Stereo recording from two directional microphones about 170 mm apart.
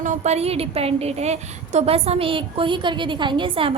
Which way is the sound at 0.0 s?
45° right (ahead or behind).